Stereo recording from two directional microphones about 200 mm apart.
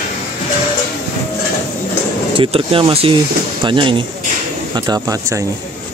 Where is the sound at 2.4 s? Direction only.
25° right (ahead or behind).